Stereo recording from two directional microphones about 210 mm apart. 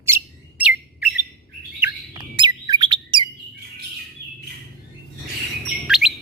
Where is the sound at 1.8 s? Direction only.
20° right (ahead or behind).